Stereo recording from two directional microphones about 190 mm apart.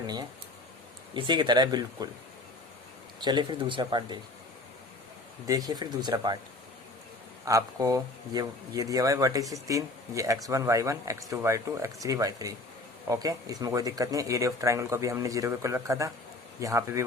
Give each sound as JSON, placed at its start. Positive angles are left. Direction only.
{"t": 1.1, "sound": "speech", "side_deg": -25}
{"t": 3.2, "sound": "speech", "side_deg": -25}
{"t": 5.5, "sound": "speech", "side_deg": -20}
{"t": 7.4, "sound": "speech", "side_deg": -15}